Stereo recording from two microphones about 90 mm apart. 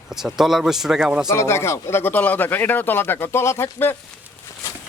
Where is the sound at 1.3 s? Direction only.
30° left (ahead or behind).